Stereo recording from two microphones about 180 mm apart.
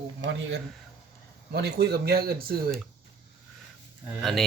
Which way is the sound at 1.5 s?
65° right (ahead or behind).